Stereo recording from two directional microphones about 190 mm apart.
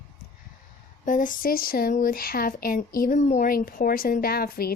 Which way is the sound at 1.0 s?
45° left (ahead or behind).